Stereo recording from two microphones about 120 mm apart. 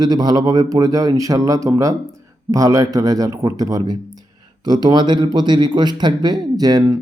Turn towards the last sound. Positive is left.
turn(degrees=-30)  # may be behind; listen again after turning